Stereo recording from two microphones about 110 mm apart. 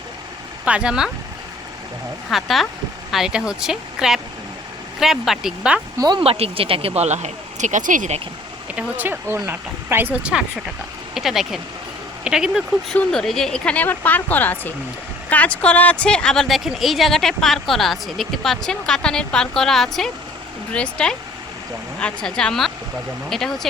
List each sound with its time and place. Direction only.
0.6 s speech: 10° right (ahead or behind)
2.3 s a woman's voice: centre (ahead or behind)
6.0 s speech: 40° right (ahead or behind)
6.2 s speech: 60° right (ahead or behind); by 8.2 s 90° right
8.7 s a woman's voice: 15° right (ahead or behind)
12.9 s a woman's voice: 5° left (ahead or behind)